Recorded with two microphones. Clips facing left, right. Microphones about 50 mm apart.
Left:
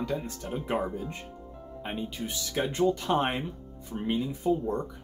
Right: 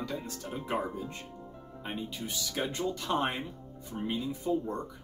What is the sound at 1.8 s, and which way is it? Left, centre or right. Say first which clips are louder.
Speech: left 3 dB; left.